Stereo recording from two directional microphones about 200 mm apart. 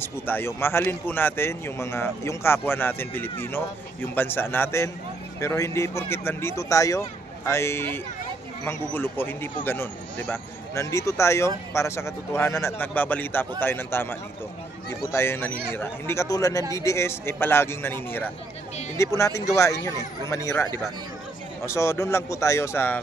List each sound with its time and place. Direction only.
0.0 s speech: 10° left (ahead or behind)
19.9 s speech: 20° right (ahead or behind)
20.2 s speech: 15° left (ahead or behind)